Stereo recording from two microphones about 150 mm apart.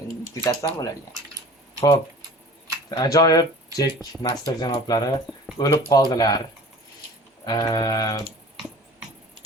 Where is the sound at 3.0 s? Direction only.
25° left (ahead or behind).